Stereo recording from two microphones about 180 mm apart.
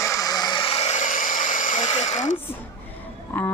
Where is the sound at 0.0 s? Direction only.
15° left (ahead or behind); by 2.4 s 40° left (ahead or behind).